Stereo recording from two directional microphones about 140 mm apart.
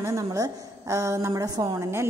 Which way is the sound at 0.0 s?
20° right (ahead or behind).